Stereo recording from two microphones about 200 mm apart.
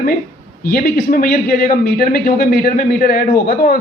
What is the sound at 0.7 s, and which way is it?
A man's voice, 45° left (ahead or behind).